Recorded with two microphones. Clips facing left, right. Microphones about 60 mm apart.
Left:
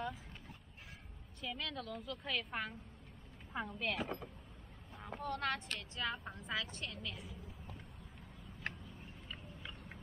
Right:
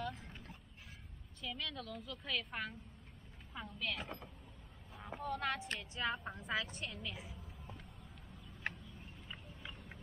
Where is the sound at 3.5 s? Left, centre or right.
Left.